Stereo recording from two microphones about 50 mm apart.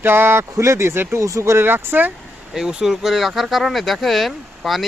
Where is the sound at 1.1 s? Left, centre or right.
Right.